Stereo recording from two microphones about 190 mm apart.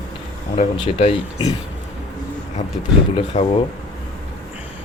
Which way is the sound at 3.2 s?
30° left (ahead or behind).